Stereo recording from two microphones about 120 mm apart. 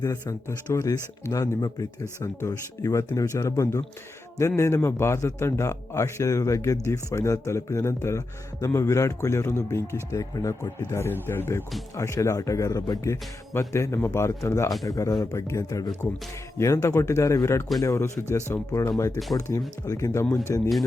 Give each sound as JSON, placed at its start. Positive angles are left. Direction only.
{"t": 0.3, "sound": "a man's voice", "side_deg": 25}